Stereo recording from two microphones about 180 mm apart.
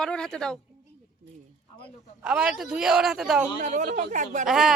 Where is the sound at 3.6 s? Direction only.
45° right (ahead or behind).